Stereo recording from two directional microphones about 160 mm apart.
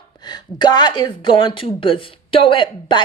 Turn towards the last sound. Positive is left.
turn(degrees=30)  # may be behind; listen again after turning